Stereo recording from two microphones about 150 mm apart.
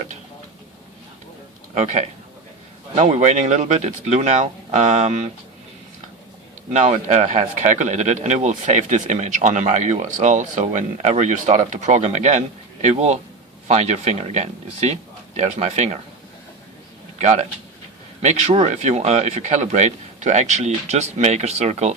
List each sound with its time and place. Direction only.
1.7 s speech: 50° right (ahead or behind)
6.7 s speech: 50° right (ahead or behind)
17.2 s speech: 50° right (ahead or behind)